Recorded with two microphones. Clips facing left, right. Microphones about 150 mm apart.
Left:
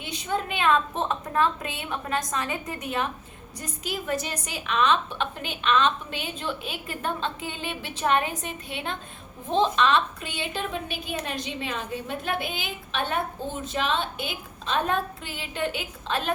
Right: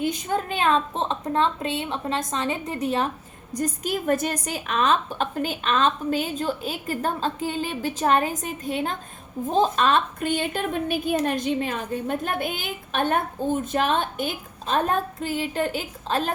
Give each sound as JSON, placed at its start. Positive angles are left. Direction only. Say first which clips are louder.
{"t": 0.0, "sound": "a woman's voice", "louder": "right 4 dB", "side_deg": -45}
{"t": 3.5, "sound": "a woman's voice", "louder": "right 8 dB", "side_deg": -45}